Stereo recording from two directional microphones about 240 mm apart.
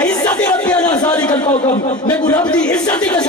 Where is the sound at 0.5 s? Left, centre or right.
Centre.